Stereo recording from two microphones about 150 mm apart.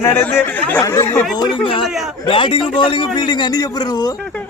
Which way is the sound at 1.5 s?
35° left (ahead or behind).